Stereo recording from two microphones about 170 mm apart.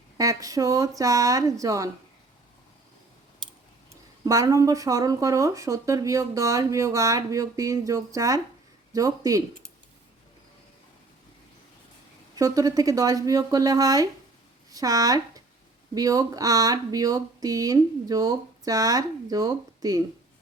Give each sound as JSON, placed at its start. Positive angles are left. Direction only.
{"t": 0.2, "sound": "speech", "side_deg": -20}
{"t": 4.3, "sound": "speech", "side_deg": -20}
{"t": 12.4, "sound": "speech", "side_deg": -20}